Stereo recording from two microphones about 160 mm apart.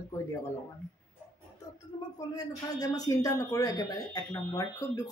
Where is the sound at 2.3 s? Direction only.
25° left (ahead or behind).